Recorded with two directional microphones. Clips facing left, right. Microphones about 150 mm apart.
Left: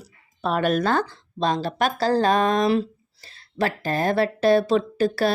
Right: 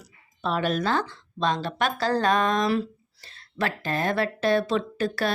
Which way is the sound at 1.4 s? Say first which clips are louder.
Left 3 dB; 35° left (ahead or behind).